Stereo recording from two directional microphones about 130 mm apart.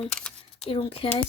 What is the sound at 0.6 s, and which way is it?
Speech, 45° left (ahead or behind).